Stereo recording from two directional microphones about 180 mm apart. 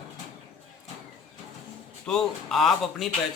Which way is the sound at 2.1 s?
5° left (ahead or behind).